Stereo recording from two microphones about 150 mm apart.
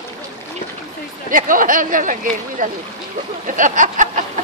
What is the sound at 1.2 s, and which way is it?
Speech, 65° right (ahead or behind).